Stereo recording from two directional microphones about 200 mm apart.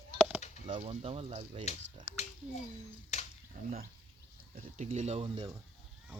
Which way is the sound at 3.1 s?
35° left (ahead or behind).